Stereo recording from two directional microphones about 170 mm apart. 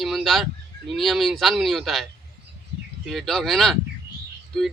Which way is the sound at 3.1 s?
Centre (ahead or behind).